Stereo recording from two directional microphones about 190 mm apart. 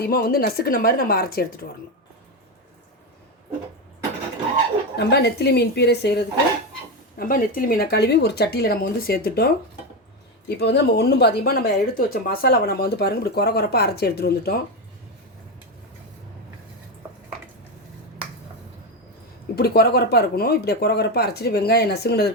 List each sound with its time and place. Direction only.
0.0 s speech: 50° left (ahead or behind)
4.9 s speech: 60° left (ahead or behind)
7.2 s speech: 50° left (ahead or behind)
10.5 s speech: 60° left (ahead or behind)
19.5 s speech: 55° left (ahead or behind)